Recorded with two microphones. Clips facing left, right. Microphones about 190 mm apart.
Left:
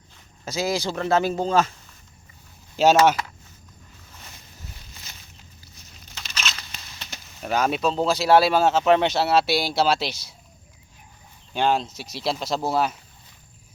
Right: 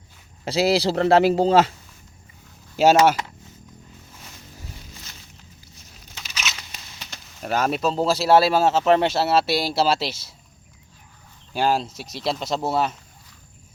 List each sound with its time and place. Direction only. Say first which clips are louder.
0.4 s speech: right 6 dB; 30° right (ahead or behind)
2.7 s speech: right 1 dB; 10° right (ahead or behind)
6.1 s a sound: even; 10° right (ahead or behind)
7.4 s speech: even; centre (ahead or behind)
11.5 s speech: even; 5° right (ahead or behind)